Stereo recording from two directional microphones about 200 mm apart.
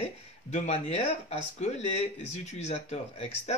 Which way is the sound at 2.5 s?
35° left (ahead or behind).